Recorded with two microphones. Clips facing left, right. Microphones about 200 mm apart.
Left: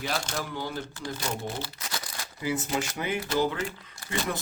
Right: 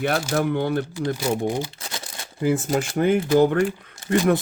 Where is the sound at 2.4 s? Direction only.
45° right (ahead or behind).